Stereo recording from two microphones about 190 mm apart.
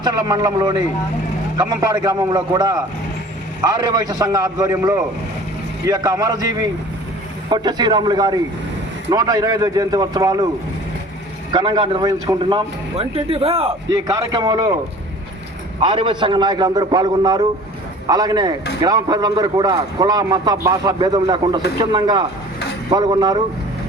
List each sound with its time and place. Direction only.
0.0 s a man's voice: 20° right (ahead or behind)
11.5 s speech: 25° right (ahead or behind)
13.9 s speech: 20° right (ahead or behind)
15.8 s speech: 25° right (ahead or behind)